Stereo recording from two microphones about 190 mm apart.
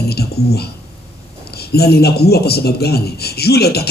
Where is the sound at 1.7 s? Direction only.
55° left (ahead or behind).